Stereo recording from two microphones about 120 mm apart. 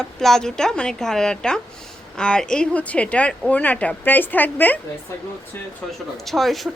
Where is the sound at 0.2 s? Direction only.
5° left (ahead or behind).